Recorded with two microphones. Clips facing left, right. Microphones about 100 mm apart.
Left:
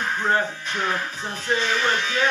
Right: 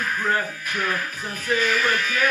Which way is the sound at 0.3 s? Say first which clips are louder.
Left 2 dB; 25° left (ahead or behind).